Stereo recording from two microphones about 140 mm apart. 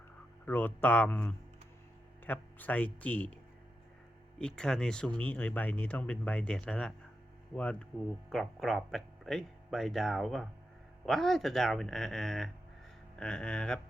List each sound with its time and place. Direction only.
0.4 s speech: 15° left (ahead or behind)
4.4 s speech: 5° left (ahead or behind)